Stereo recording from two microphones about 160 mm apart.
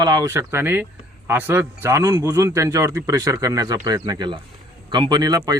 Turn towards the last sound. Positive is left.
turn(degrees=-25)  # may be behind; listen again after turning